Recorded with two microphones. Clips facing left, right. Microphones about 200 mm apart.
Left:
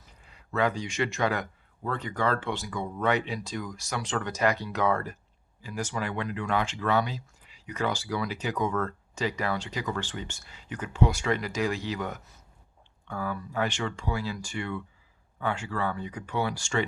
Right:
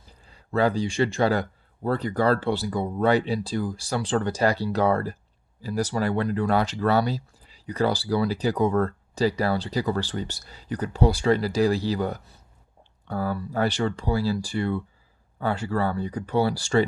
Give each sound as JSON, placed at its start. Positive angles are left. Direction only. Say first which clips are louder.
{"t": 0.0, "sound": "speech", "louder": "right 3 dB", "side_deg": -30}